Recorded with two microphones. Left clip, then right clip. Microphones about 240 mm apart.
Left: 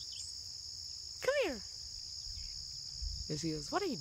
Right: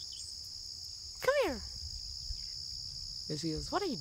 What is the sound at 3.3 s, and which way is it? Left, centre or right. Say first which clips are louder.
Insect: right 2 dB; centre.